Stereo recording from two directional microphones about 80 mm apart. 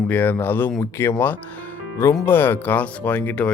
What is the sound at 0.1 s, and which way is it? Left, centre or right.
Speech, left.